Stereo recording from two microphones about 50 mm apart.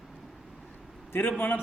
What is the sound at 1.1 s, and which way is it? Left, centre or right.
Speech, left.